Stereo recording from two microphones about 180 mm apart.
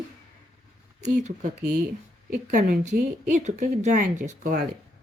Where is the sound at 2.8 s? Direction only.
40° right (ahead or behind).